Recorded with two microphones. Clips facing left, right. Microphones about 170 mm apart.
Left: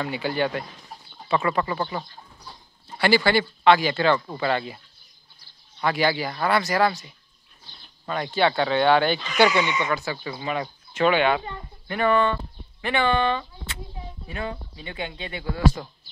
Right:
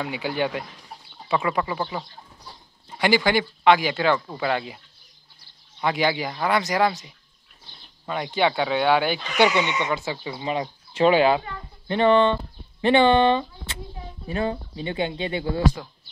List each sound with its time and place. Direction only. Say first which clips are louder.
0.0 s speech: left 1 dB; 10° right (ahead or behind)
5.8 s speech: even; 15° right (ahead or behind)
9.8 s speech: even; 20° right (ahead or behind)